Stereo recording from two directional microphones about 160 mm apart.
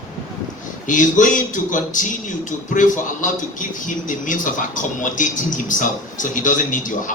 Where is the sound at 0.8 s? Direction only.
55° left (ahead or behind).